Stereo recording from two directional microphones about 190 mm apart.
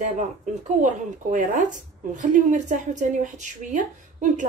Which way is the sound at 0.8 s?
40° right (ahead or behind).